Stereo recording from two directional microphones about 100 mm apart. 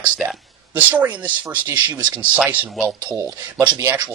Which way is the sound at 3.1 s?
30° right (ahead or behind).